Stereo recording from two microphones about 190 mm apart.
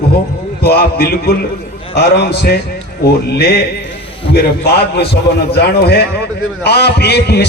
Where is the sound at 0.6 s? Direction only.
55° left (ahead or behind).